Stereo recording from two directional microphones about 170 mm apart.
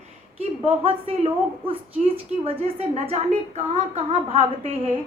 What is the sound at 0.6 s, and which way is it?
A woman's voice, 35° right (ahead or behind).